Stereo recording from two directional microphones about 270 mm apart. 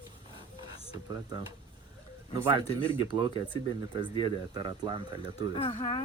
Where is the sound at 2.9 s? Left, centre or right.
Centre.